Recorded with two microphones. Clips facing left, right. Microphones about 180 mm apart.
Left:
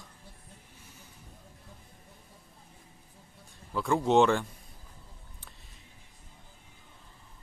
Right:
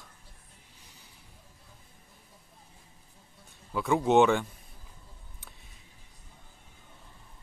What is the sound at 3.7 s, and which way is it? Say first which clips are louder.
Speech: right 1 dB; 5° right (ahead or behind).